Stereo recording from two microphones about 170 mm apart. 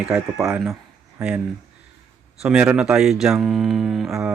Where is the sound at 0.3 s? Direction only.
15° right (ahead or behind).